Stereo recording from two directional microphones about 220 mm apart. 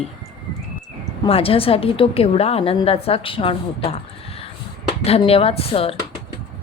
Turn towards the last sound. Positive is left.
turn(degrees=25)  # may be behind; listen again after turning